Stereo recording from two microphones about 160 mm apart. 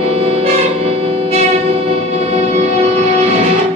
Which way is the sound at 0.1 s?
40° right (ahead or behind).